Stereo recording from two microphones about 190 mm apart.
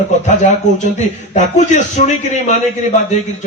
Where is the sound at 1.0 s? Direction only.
40° left (ahead or behind).